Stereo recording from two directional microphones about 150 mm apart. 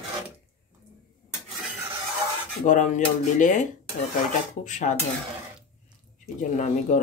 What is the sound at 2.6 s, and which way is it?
Speech, 55° left (ahead or behind).